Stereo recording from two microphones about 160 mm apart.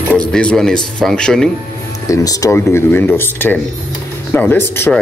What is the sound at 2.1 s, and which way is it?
Speech, 20° left (ahead or behind).